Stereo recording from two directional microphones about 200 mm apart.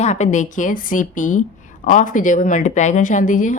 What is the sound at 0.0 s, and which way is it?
A woman's voice, 35° left (ahead or behind).